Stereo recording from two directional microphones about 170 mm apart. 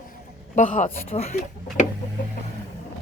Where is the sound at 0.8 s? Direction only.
40° left (ahead or behind).